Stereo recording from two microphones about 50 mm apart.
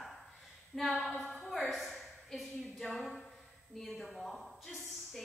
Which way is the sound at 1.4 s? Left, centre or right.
Centre.